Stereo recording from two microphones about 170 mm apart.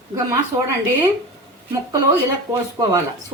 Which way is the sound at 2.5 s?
20° right (ahead or behind).